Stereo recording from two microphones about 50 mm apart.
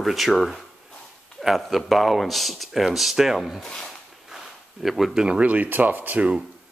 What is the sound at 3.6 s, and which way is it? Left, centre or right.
Speech, centre.